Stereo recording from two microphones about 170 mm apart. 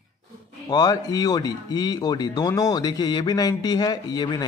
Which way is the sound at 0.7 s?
25° left (ahead or behind).